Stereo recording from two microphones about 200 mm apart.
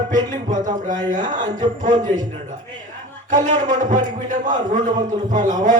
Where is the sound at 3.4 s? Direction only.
40° right (ahead or behind).